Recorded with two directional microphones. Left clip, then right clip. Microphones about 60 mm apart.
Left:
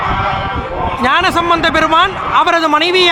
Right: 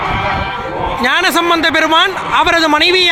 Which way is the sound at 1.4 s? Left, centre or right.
Right.